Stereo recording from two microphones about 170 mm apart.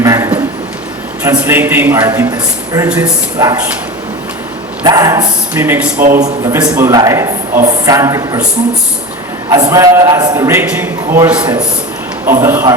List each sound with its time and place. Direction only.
0.0 s a sound: 20° right (ahead or behind)
1.4 s a man's voice: 10° right (ahead or behind)
4.8 s a man's voice: 20° right (ahead or behind)
9.5 s a man's voice: 20° right (ahead or behind)